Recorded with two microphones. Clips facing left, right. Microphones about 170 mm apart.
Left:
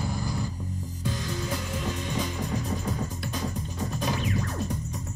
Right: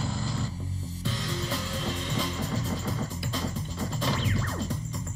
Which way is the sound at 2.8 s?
90° right.